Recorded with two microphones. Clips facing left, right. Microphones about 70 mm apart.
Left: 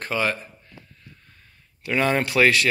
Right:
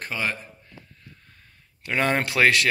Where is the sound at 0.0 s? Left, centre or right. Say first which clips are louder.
Left 4 dB; centre.